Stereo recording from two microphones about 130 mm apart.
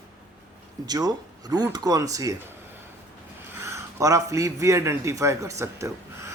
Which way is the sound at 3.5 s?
20° right (ahead or behind).